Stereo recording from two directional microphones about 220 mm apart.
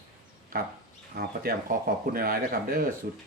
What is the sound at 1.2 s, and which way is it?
Speech, 40° right (ahead or behind).